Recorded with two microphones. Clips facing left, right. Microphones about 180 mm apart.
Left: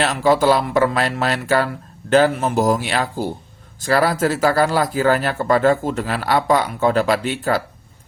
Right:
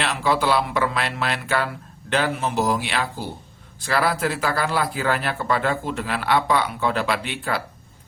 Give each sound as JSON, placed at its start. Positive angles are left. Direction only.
{"t": 0.0, "sound": "speech", "side_deg": 40}